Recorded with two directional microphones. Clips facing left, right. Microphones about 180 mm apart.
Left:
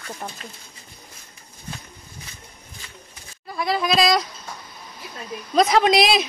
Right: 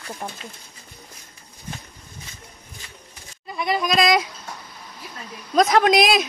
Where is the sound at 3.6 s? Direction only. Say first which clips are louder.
Even; centre (ahead or behind).